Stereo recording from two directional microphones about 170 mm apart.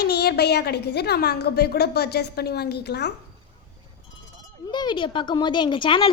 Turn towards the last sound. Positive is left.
turn(degrees=30)  # may be behind; listen again after turning